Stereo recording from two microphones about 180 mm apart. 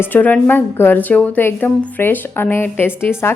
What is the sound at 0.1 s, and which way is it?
A woman's voice, 10° left (ahead or behind).